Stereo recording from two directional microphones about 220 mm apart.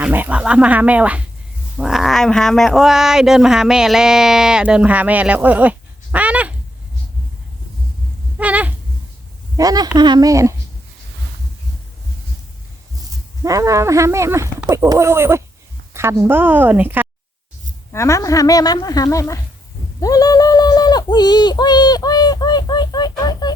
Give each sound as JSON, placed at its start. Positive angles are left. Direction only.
{"t": 0.0, "sound": "speech", "side_deg": -5}
{"t": 8.4, "sound": "a sound", "side_deg": -5}
{"t": 9.6, "sound": "speech", "side_deg": -15}
{"t": 13.4, "sound": "speech", "side_deg": -15}
{"t": 17.9, "sound": "speech", "side_deg": 15}